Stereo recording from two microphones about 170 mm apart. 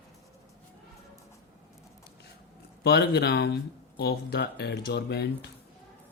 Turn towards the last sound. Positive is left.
turn(degrees=80)